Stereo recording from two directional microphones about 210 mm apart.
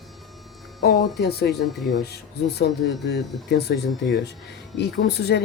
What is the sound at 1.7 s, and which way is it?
Speech, centre (ahead or behind).